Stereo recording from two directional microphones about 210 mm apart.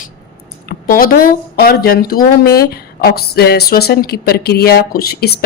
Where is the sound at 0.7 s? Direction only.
45° left (ahead or behind).